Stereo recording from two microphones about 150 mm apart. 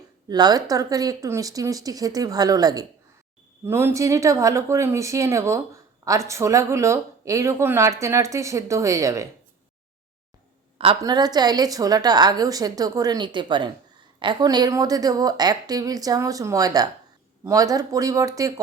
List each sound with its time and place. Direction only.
0.3 s speech: 25° right (ahead or behind)
11.0 s speech: 25° right (ahead or behind)